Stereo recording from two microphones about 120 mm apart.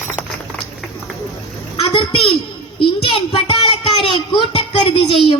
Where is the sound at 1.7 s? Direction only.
45° left (ahead or behind).